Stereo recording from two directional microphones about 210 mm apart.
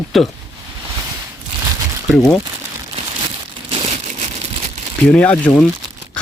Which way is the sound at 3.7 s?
25° right (ahead or behind).